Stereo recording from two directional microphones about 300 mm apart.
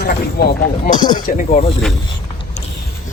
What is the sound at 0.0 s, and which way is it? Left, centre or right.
Speech, left.